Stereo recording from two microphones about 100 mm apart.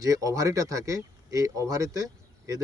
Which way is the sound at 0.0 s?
35° right (ahead or behind).